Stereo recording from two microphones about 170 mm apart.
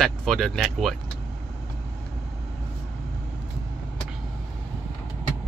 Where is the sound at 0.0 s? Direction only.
Centre (ahead or behind).